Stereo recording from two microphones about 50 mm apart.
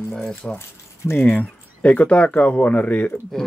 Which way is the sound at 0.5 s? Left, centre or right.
Left.